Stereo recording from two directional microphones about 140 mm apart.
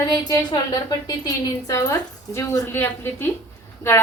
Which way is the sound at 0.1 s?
25° left (ahead or behind).